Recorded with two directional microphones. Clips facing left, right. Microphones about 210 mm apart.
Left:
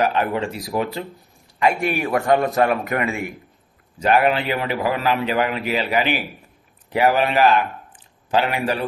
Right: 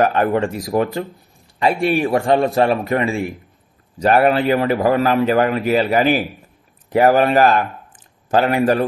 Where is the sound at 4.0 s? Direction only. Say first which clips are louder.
Right 4 dB; 40° right (ahead or behind).